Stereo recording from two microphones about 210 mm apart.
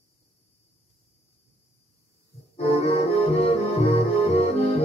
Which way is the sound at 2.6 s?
30° left (ahead or behind).